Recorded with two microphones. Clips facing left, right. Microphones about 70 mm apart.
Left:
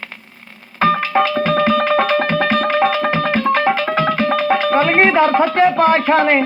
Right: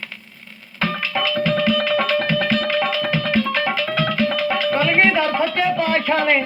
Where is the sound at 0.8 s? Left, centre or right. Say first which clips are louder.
Left 8 dB; left.